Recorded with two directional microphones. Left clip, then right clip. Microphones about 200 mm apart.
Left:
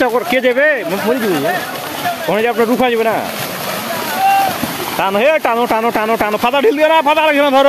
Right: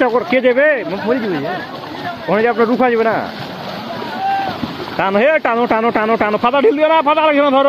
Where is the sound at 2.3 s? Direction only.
25° left (ahead or behind).